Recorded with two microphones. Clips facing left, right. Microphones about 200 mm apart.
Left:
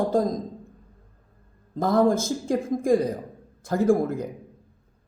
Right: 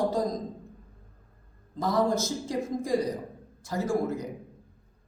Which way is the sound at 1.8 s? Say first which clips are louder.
Left 5 dB; 50° left (ahead or behind).